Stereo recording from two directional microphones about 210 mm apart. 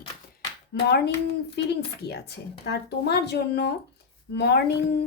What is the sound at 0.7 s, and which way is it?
Speech, 55° left (ahead or behind).